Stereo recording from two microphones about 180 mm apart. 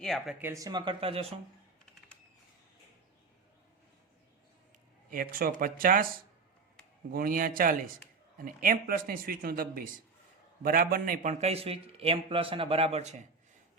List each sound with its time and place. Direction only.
0.0 s speech: centre (ahead or behind)
0.3 s speech: 15° right (ahead or behind); by 1.3 s 30° right (ahead or behind)
5.1 s a man's voice: 55° right (ahead or behind)
7.1 s a man's voice: 50° right (ahead or behind)